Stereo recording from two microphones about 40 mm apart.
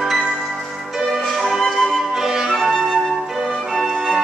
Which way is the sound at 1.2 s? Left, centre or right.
Centre.